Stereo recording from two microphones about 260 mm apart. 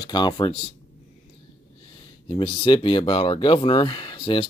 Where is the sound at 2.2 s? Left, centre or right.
Centre.